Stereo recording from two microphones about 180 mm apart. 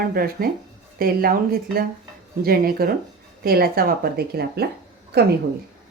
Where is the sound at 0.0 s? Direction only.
55° right (ahead or behind).